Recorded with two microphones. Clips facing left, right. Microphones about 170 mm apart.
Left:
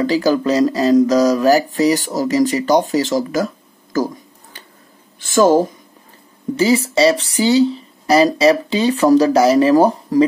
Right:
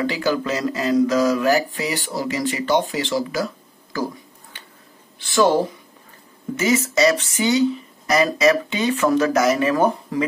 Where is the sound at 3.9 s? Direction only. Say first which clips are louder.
Left 6 dB; 45° left (ahead or behind).